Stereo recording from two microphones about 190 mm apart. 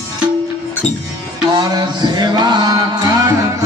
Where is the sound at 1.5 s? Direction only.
20° right (ahead or behind).